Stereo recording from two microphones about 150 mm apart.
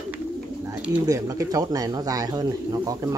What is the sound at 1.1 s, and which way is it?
Speech, 20° right (ahead or behind).